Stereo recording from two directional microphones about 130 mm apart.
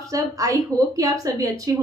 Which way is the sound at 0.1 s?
25° right (ahead or behind).